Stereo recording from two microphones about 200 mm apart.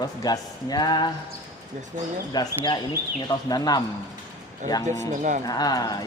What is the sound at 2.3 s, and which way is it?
Speech, 20° left (ahead or behind).